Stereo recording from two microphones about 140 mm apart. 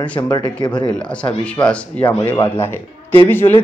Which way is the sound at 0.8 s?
10° left (ahead or behind).